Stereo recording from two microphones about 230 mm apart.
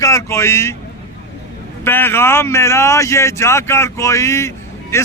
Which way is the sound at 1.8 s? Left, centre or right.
Centre.